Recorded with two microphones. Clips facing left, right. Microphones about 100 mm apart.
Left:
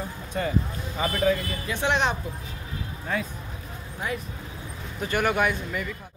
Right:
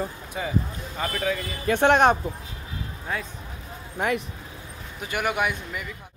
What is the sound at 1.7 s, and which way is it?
Speech, 55° right (ahead or behind).